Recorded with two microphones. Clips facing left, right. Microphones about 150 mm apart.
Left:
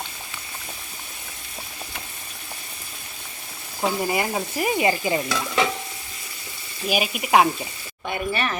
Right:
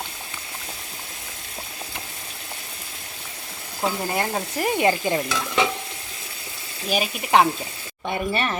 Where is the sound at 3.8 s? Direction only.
5° left (ahead or behind).